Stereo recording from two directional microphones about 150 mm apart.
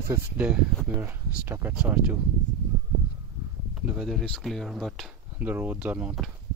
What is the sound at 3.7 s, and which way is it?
Speech, 5° right (ahead or behind).